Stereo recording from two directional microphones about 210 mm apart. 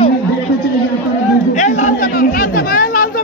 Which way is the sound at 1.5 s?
35° left (ahead or behind).